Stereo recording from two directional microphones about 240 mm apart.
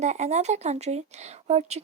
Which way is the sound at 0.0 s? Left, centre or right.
Right.